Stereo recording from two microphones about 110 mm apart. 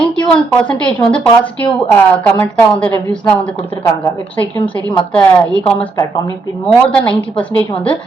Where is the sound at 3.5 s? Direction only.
55° left (ahead or behind).